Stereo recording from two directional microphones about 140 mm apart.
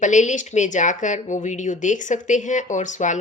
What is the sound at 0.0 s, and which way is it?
A woman's voice, 60° left (ahead or behind).